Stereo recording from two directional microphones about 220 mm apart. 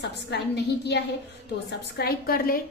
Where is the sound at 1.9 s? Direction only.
45° left (ahead or behind).